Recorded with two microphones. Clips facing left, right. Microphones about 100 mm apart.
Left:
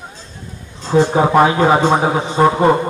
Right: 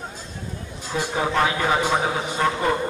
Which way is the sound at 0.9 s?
40° left (ahead or behind).